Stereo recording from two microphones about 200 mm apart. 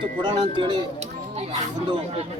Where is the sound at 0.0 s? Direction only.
25° right (ahead or behind).